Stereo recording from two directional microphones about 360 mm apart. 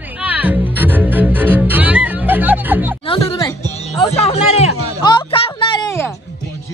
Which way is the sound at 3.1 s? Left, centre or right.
Centre.